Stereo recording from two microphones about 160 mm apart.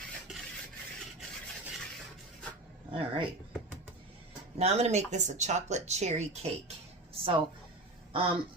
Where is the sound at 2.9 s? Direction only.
35° right (ahead or behind).